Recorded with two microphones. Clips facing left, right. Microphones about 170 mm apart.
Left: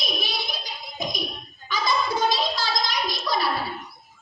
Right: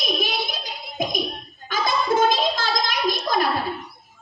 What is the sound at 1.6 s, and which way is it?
Gargling, 50° right (ahead or behind).